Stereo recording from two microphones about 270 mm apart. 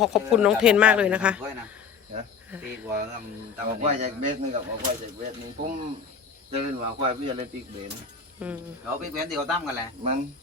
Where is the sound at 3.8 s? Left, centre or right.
Right.